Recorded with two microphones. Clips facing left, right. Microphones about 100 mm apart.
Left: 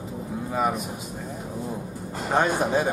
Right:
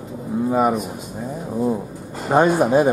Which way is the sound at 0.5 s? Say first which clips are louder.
Right 6 dB; 5° right (ahead or behind).